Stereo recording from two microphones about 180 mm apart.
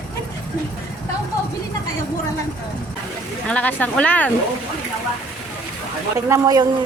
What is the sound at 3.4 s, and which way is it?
Speech, 5° left (ahead or behind).